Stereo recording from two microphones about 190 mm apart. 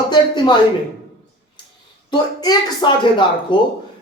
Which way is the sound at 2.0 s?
20° left (ahead or behind).